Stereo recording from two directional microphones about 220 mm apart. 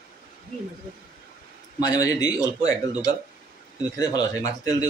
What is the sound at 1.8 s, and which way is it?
Speech, 15° left (ahead or behind).